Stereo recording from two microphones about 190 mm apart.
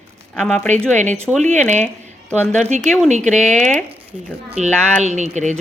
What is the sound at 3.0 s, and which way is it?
Speech, 40° right (ahead or behind).